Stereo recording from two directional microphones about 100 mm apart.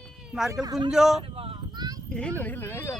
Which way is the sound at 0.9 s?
5° right (ahead or behind).